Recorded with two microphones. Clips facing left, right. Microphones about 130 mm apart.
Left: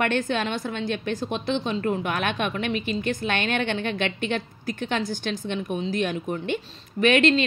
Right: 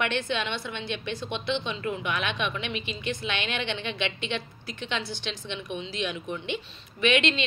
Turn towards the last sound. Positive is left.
turn(degrees=45)  # may be behind; listen again after turning